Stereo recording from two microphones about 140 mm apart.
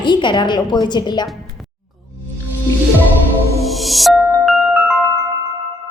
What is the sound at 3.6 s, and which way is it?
Music, centre (ahead or behind).